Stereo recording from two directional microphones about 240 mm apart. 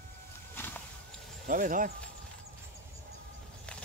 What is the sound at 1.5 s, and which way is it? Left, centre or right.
Speech, right.